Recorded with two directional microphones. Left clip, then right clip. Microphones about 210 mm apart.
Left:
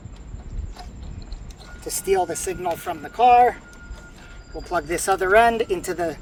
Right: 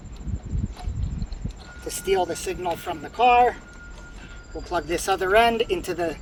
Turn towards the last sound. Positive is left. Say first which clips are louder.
# left 1 dB
turn(degrees=5)  # may be behind; listen again after turning